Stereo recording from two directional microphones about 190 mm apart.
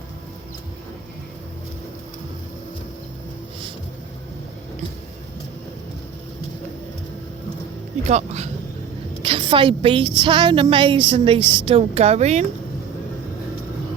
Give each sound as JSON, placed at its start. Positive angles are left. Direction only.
{"t": 8.0, "sound": "a woman's voice", "side_deg": -35}